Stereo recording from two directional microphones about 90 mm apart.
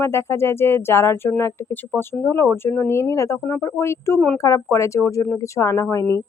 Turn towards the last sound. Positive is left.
turn(degrees=35)  # may be behind; listen again after turning